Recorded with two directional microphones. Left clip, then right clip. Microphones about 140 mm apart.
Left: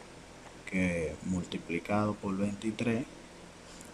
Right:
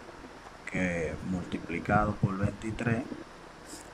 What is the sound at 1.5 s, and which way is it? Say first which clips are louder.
Speech: right 5 dB; 30° left (ahead or behind).